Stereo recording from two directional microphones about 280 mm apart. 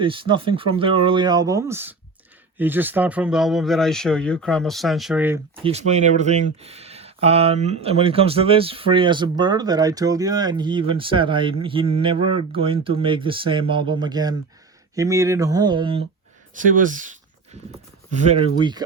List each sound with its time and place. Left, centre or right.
0.0 s speech: centre
5.5 s speech: right
18.1 s speech: right